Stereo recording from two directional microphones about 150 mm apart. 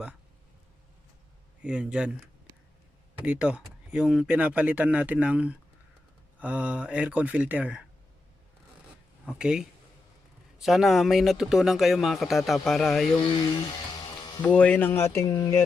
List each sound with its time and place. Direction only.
1.6 s speech: 5° right (ahead or behind)
3.2 s speech: 10° right (ahead or behind)
9.2 s speech: 5° right (ahead or behind)
13.3 s speech: 30° left (ahead or behind)
14.4 s speech: 10° left (ahead or behind)